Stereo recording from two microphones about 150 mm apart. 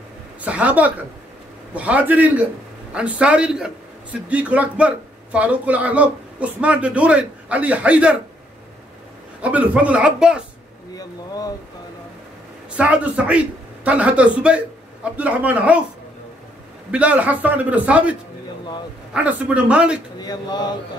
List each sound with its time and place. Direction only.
0.5 s a man's voice: 10° right (ahead or behind)
9.4 s a man's voice: 10° right (ahead or behind)
11.0 s speech: 25° left (ahead or behind)
12.7 s a man's voice: 10° right (ahead or behind)
16.9 s a man's voice: 10° right (ahead or behind)
19.1 s a man's voice: 10° right (ahead or behind)
20.2 s mantra: 25° left (ahead or behind)